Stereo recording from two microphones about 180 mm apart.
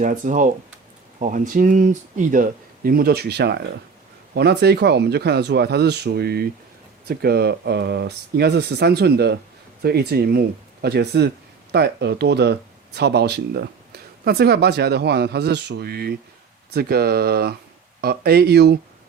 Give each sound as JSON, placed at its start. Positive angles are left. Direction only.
{"t": 0.0, "sound": "speech", "side_deg": -45}